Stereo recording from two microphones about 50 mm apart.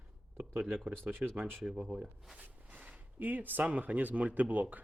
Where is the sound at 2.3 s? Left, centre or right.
Right.